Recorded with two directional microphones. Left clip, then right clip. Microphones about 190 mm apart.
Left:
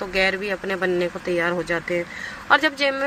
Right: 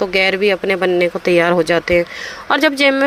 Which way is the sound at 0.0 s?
40° right (ahead or behind).